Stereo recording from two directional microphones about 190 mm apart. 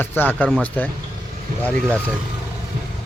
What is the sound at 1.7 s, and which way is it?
Speech, 5° left (ahead or behind).